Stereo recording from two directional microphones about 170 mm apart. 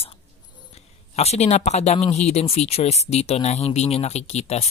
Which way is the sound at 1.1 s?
40° left (ahead or behind).